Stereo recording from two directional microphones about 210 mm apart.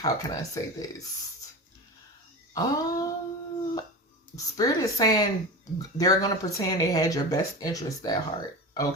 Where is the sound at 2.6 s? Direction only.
15° left (ahead or behind).